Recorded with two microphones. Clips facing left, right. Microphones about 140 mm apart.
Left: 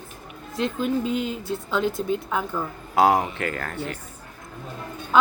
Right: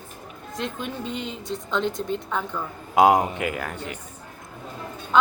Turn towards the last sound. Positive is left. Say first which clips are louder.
# right 1 dB
turn(degrees=-15)  # may be behind; listen again after turning